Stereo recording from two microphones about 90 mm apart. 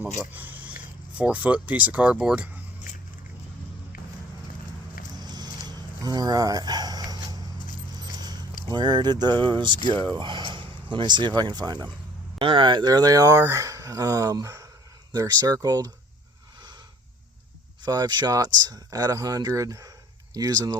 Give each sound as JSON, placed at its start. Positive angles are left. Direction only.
{"t": 0.0, "sound": "speech", "side_deg": -20}
{"t": 5.1, "sound": "a sound", "side_deg": -50}
{"t": 10.2, "sound": "speech", "side_deg": -60}
{"t": 12.4, "sound": "speech", "side_deg": -70}
{"t": 17.8, "sound": "speech", "side_deg": -50}